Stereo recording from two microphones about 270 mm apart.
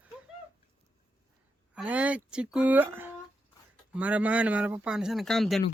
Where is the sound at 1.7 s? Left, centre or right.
Centre.